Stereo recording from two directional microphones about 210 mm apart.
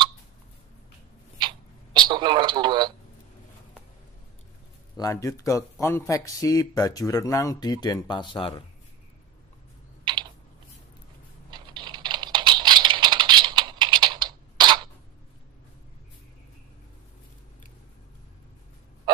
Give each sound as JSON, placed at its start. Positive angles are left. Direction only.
{"t": 2.0, "sound": "radio", "side_deg": -20}
{"t": 4.9, "sound": "speech", "side_deg": 15}
{"t": 10.1, "sound": "typing", "side_deg": -20}
{"t": 11.5, "sound": "a sound", "side_deg": -20}